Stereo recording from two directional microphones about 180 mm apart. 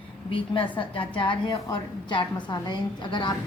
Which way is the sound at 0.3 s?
30° left (ahead or behind).